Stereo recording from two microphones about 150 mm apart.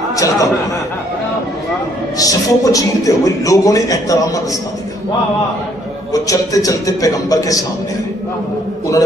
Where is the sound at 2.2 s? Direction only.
25° left (ahead or behind).